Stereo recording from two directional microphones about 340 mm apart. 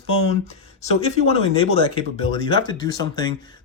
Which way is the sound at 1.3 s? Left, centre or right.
Centre.